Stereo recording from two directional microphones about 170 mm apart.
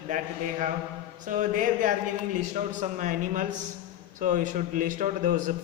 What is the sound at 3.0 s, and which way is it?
Speech, 50° right (ahead or behind).